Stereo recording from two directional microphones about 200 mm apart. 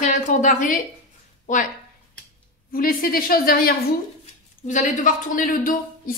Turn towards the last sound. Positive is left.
turn(degrees=45)  # may be behind; listen again after turning